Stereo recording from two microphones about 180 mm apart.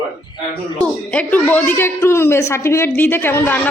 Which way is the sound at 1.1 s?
10° left (ahead or behind).